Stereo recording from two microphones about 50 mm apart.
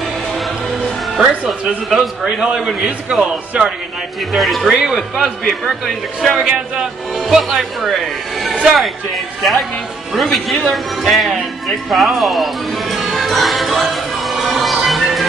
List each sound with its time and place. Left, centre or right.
2.2 s a man's voice: centre
4.3 s speech: centre
4.7 s a man's voice: centre
12.9 s music: centre